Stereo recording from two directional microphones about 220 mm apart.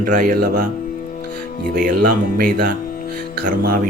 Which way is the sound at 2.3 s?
45° right (ahead or behind).